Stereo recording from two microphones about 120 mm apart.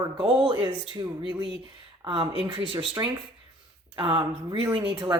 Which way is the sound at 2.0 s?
45° right (ahead or behind).